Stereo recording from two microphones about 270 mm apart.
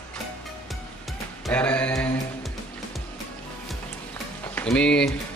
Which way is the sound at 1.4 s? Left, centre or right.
Centre.